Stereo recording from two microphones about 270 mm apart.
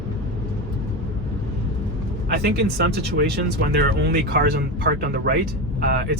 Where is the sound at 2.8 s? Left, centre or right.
Right.